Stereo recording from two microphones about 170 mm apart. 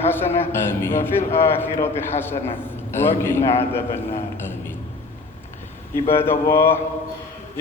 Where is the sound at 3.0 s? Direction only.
15° left (ahead or behind).